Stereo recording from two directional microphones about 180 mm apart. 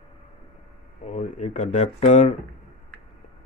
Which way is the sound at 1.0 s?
40° left (ahead or behind).